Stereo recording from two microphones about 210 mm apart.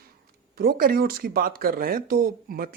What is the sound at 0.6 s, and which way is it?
Speech, 45° right (ahead or behind).